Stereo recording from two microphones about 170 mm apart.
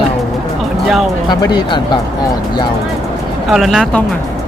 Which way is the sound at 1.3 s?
25° left (ahead or behind).